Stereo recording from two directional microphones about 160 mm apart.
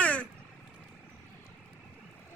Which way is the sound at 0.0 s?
10° left (ahead or behind).